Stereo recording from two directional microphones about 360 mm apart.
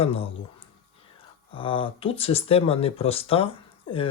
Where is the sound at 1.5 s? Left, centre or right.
Centre.